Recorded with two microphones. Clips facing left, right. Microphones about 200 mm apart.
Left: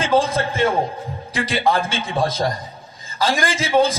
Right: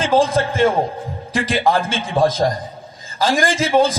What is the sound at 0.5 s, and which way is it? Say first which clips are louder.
A man's voice: right 3 dB; 50° right (ahead or behind).